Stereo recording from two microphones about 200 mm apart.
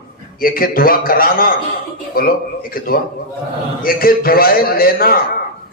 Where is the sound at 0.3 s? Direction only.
45° left (ahead or behind).